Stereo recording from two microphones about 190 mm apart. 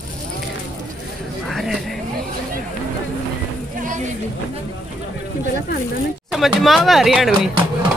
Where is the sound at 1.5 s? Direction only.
Centre (ahead or behind).